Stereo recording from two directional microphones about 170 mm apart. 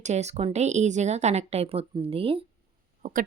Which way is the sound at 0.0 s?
40° right (ahead or behind).